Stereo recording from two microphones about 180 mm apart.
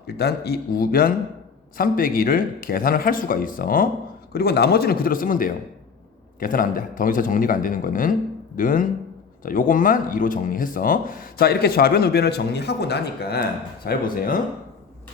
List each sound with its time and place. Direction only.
0.1 s a man's voice: 60° left (ahead or behind)
13.8 s speech: 50° left (ahead or behind)